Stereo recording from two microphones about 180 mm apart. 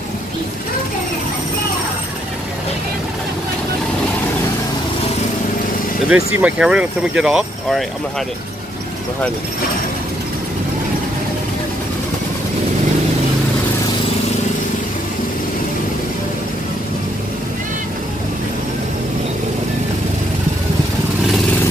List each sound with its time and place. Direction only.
6.0 s speech: 5° right (ahead or behind)